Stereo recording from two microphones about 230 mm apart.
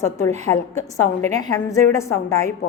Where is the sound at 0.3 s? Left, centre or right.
Right.